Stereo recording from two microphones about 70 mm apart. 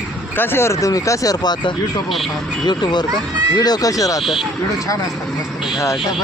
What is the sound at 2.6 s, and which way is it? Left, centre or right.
Speech, left.